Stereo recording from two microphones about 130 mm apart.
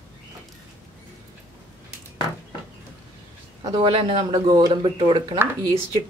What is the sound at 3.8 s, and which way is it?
Speech, 45° right (ahead or behind).